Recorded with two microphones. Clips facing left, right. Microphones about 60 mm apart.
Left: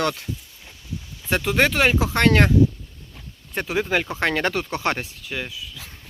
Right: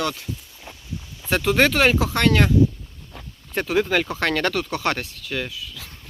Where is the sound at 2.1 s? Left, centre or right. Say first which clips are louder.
Left 1 dB; left.